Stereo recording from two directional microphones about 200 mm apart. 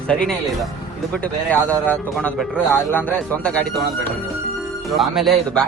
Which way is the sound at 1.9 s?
5° left (ahead or behind).